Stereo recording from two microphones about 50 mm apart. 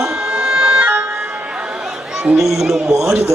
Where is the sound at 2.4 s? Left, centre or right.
Centre.